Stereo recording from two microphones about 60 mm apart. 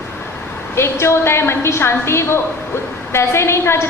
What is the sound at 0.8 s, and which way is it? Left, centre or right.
A woman's voice, left.